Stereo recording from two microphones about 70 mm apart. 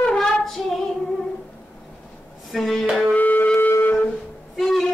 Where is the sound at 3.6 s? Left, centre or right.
Left.